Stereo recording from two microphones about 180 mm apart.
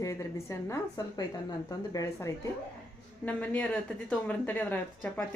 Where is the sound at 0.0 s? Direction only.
15° left (ahead or behind).